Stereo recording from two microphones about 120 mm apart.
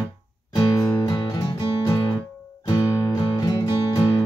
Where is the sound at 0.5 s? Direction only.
30° left (ahead or behind).